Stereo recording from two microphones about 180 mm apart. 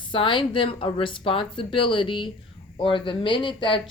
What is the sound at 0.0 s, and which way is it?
A woman's voice, 25° left (ahead or behind).